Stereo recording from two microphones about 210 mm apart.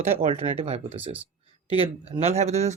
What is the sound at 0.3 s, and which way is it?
Speech, 30° right (ahead or behind).